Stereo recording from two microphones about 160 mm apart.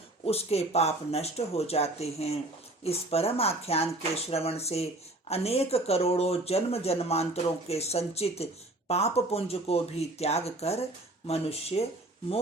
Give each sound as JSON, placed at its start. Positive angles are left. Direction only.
{"t": 0.3, "sound": "speech", "side_deg": 40}